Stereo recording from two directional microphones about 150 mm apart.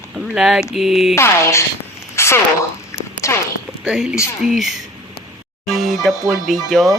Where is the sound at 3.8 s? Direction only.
5° right (ahead or behind).